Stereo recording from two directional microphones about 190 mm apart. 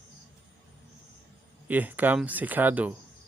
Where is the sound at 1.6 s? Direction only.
10° right (ahead or behind).